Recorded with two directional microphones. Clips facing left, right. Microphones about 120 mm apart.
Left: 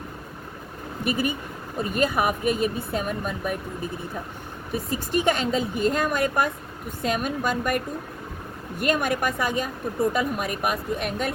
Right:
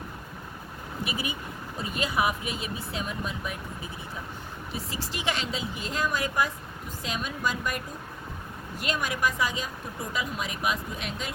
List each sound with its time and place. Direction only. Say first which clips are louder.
1.0 s speech: left 9 dB; 50° left (ahead or behind)
4.7 s speech: left 11 dB; 50° left (ahead or behind)
8.8 s speech: left 5 dB; 55° left (ahead or behind)